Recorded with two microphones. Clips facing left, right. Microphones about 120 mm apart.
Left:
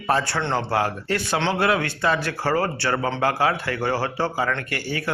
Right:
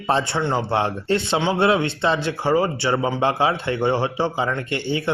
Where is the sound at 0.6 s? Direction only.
25° right (ahead or behind).